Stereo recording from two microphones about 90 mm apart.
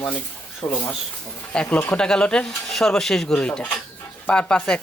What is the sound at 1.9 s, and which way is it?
Speech, 10° left (ahead or behind).